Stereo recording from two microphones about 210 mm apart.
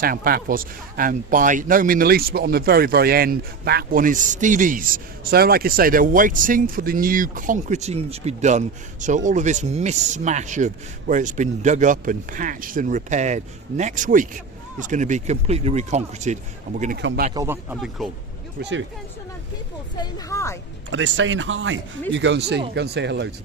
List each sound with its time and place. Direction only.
0.0 s a man's voice: 45° right (ahead or behind)
17.3 s speech: 10° right (ahead or behind)
18.6 s speech: 60° right (ahead or behind)
20.0 s speech: 15° left (ahead or behind)
20.9 s speech: 60° right (ahead or behind)